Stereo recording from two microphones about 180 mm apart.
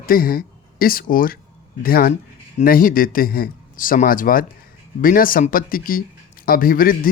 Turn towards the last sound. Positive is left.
turn(degrees=50)  # may be behind; listen again after turning